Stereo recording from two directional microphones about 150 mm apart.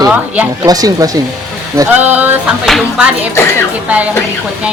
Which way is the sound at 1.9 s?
10° right (ahead or behind).